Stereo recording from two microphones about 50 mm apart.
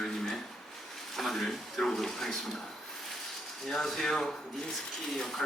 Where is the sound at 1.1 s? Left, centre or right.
Centre.